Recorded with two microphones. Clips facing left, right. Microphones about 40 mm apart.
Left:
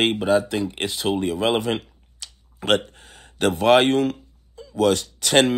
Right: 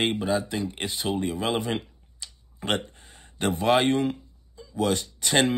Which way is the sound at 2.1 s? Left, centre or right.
Left.